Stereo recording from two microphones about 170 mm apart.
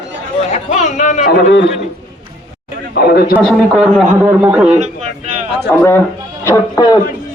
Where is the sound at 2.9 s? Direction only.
65° left (ahead or behind).